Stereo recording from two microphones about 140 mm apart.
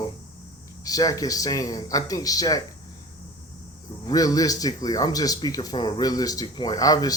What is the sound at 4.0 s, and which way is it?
Speech, 25° left (ahead or behind).